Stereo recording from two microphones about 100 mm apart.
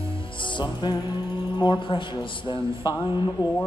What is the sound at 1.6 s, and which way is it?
A man's voice, 55° left (ahead or behind).